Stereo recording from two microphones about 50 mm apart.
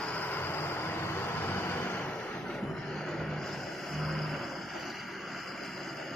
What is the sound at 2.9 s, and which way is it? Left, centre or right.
Vehicle, centre.